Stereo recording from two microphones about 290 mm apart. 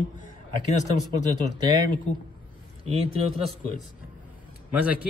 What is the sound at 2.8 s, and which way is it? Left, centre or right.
Speech, right.